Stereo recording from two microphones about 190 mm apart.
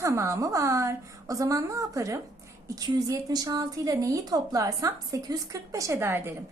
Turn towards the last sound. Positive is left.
turn(degrees=-10)  # may be behind; listen again after turning